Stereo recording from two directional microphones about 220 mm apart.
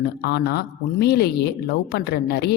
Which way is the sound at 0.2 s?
50° left (ahead or behind).